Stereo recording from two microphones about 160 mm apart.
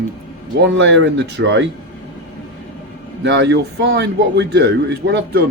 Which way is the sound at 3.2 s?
90° right.